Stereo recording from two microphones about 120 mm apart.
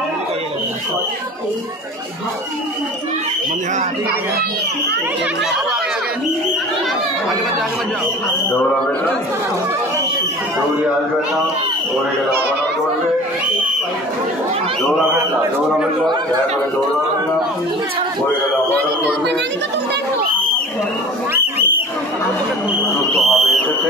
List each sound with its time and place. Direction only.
8.5 s a man's voice: 15° left (ahead or behind)
21.3 s a sound: 15° right (ahead or behind)
23.2 s speech: centre (ahead or behind)